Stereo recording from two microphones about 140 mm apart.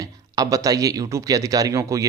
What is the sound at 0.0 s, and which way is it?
Speech, 25° right (ahead or behind).